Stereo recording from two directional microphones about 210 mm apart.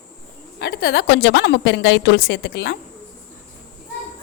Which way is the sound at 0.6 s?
50° left (ahead or behind).